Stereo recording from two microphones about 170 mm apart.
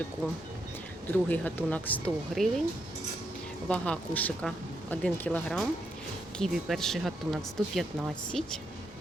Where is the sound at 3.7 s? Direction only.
5° left (ahead or behind).